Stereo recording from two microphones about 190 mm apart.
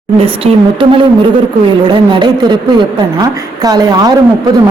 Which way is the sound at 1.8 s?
25° right (ahead or behind).